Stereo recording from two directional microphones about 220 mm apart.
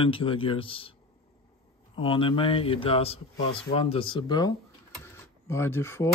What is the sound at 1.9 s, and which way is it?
Speech, 25° left (ahead or behind).